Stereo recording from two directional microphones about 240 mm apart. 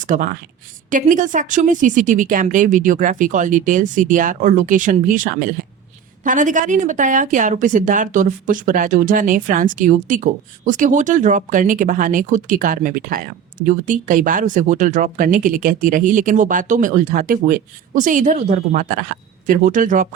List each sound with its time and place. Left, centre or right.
0.0 s a woman's voice: right